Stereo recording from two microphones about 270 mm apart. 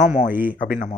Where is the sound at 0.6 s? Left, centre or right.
Left.